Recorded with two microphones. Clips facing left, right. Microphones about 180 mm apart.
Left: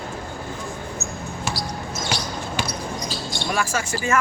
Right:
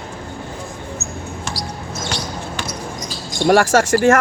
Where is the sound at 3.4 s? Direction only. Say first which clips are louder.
Right 13 dB; 80° right.